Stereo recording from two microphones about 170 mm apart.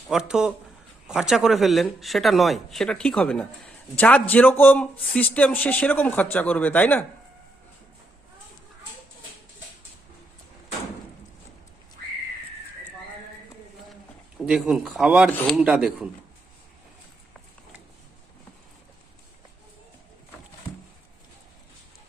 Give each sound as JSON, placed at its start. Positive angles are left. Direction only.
{"t": 0.1, "sound": "a man's voice", "side_deg": -5}
{"t": 14.3, "sound": "speech", "side_deg": 0}
{"t": 15.3, "sound": "a man's voice", "side_deg": 10}
{"t": 15.5, "sound": "speech", "side_deg": -5}